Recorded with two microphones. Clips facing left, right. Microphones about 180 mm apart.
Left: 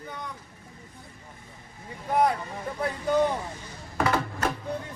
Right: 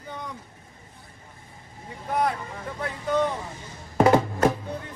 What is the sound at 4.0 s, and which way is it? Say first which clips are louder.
Music: right 8 dB; 25° right (ahead or behind).